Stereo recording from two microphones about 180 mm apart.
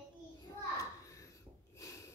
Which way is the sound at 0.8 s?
20° left (ahead or behind).